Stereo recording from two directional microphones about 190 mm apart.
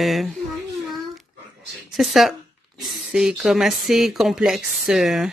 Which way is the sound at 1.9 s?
Centre (ahead or behind).